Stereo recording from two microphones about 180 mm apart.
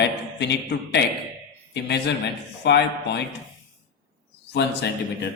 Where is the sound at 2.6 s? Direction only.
70° left (ahead or behind).